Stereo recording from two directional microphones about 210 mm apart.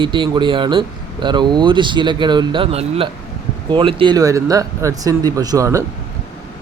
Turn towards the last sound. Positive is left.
turn(degrees=-15)  # may be behind; listen again after turning